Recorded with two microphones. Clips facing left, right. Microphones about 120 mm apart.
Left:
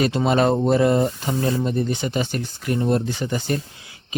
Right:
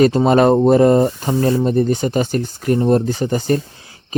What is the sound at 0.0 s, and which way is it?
Speech, 40° right (ahead or behind).